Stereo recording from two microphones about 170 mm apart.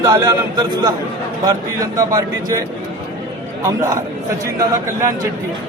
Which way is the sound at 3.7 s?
15° right (ahead or behind).